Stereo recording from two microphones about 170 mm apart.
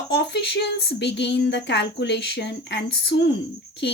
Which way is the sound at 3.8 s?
90° left.